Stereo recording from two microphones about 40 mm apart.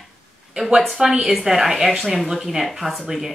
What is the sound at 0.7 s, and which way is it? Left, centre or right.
Speech, centre.